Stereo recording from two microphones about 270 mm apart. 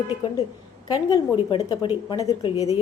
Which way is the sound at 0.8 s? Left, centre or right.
Centre.